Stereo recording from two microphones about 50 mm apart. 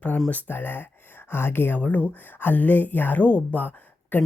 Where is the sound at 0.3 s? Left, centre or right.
Left.